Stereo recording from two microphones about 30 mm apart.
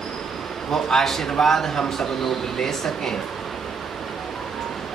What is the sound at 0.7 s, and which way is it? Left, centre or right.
Speech, centre.